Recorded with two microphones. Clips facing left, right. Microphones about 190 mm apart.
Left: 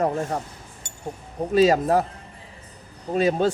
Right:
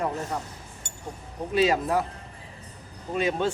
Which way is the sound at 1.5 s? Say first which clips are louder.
Left 5 dB; 40° left (ahead or behind).